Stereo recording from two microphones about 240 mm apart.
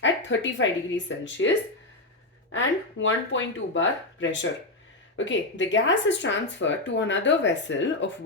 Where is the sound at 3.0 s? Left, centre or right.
Left.